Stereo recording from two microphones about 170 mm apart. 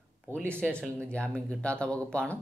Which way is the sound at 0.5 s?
5° left (ahead or behind).